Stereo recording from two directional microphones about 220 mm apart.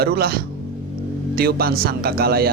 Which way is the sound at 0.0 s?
45° right (ahead or behind).